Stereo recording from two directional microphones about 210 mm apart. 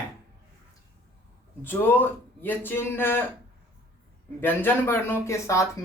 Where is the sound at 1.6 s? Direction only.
10° left (ahead or behind).